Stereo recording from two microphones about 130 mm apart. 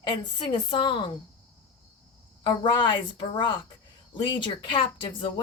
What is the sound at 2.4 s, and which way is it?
Speech, 40° left (ahead or behind).